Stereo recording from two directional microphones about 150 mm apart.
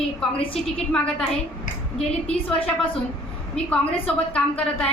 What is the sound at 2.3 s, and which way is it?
Speech, 5° left (ahead or behind).